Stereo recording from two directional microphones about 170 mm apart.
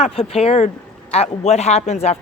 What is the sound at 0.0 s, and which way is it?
Speech, 35° left (ahead or behind).